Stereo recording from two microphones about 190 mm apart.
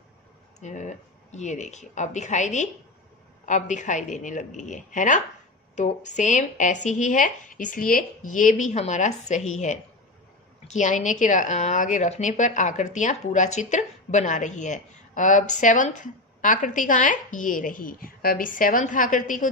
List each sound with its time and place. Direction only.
0.6 s a woman's voice: 40° left (ahead or behind)